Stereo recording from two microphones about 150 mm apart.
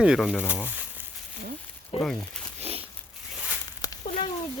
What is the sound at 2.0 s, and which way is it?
Speech, 5° left (ahead or behind).